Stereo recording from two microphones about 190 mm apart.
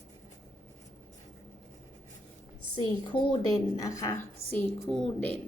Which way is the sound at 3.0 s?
25° left (ahead or behind).